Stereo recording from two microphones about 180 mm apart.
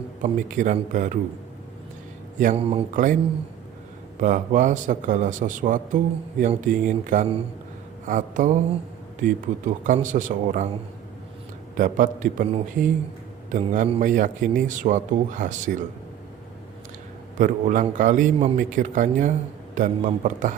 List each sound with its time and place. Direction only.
0.2 s a man's voice: 45° right (ahead or behind)
2.6 s speech: 35° right (ahead or behind)
2.9 s a man's voice: 45° right (ahead or behind)
4.2 s a man's voice: 45° right (ahead or behind)
11.8 s a man's voice: 45° right (ahead or behind)
17.3 s a man's voice: 45° right (ahead or behind)